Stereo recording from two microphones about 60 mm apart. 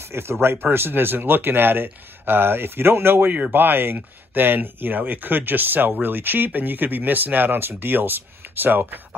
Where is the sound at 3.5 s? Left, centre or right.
Right.